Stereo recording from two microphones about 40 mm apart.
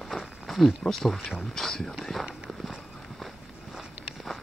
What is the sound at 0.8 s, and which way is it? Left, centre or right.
Speech, centre.